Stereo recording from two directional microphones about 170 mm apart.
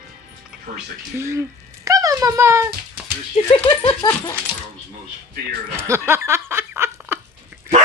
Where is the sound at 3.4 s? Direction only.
40° left (ahead or behind).